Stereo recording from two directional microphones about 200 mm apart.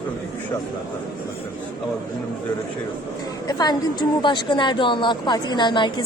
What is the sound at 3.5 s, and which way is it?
A woman's voice, 20° left (ahead or behind).